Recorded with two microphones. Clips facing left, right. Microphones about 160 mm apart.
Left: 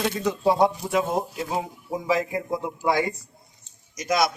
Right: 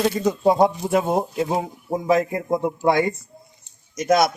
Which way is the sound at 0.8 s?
30° right (ahead or behind).